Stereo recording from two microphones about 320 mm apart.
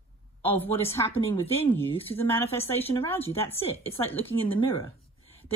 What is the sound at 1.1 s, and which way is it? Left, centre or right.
Speech, centre.